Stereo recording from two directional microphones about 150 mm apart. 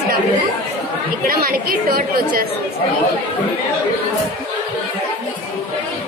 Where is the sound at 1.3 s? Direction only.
75° right (ahead or behind).